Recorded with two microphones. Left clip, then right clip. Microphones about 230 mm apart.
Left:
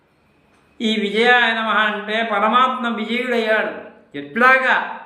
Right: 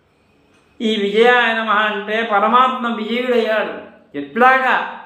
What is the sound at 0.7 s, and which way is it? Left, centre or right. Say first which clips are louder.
A man's voice: right 4 dB; centre.